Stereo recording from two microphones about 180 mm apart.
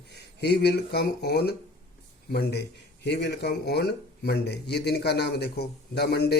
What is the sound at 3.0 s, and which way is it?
Speech, 70° left (ahead or behind).